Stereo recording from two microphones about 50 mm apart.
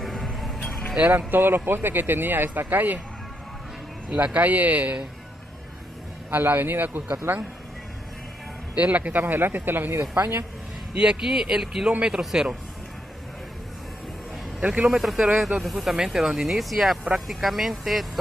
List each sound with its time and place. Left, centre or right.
0.0 s music: centre
1.1 s speech: right
4.2 s speech: right
6.3 s speech: right
8.7 s speech: right
11.0 s speech: centre
14.7 s speech: centre